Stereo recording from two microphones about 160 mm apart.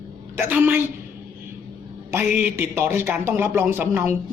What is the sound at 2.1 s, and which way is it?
A man's voice, 10° right (ahead or behind).